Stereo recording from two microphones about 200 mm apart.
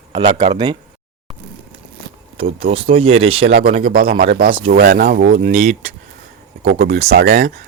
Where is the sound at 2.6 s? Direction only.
30° right (ahead or behind).